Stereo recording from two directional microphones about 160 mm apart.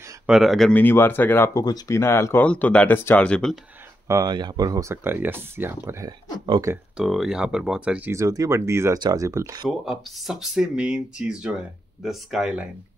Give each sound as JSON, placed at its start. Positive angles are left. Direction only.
{"t": 0.3, "sound": "speech", "side_deg": 0}
{"t": 4.1, "sound": "speech", "side_deg": -25}
{"t": 6.4, "sound": "speech", "side_deg": -30}
{"t": 6.7, "sound": "speech", "side_deg": -5}
{"t": 9.7, "sound": "speech", "side_deg": 0}